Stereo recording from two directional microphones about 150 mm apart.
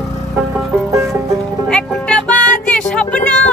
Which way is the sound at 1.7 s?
5° left (ahead or behind).